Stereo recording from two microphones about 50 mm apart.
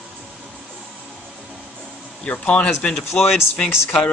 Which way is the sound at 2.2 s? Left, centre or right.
Left.